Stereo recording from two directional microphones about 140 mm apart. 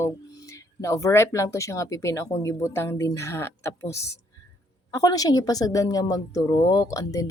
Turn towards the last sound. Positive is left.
turn(degrees=25)  # may be behind; listen again after turning